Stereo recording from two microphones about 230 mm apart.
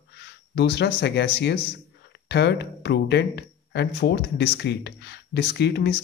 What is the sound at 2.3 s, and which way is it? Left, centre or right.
Speech, left.